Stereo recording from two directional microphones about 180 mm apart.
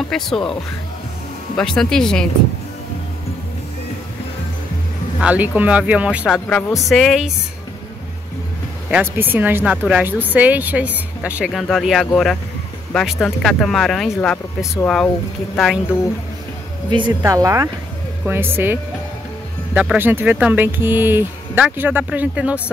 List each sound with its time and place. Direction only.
0.1 s speech: centre (ahead or behind)
1.6 s speech: 5° left (ahead or behind)
5.2 s speech: 10° right (ahead or behind)
8.9 s speech: 10° right (ahead or behind)
15.5 s speech: centre (ahead or behind)
16.9 s speech: 20° right (ahead or behind)